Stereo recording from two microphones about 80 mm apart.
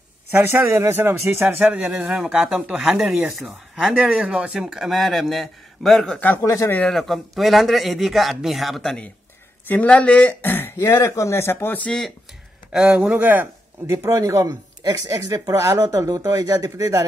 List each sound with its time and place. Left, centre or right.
0.3 s speech: right
1.7 s speech: centre
6.1 s speech: left
6.4 s speech: left
6.9 s a man's voice: centre
9.7 s speech: centre
11.8 s speech: centre
12.7 s speech: centre
13.9 s speech: right